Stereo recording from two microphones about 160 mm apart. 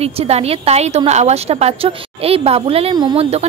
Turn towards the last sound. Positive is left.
turn(degrees=-40)  # may be behind; listen again after turning